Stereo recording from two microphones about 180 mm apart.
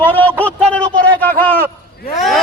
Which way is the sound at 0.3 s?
10° left (ahead or behind).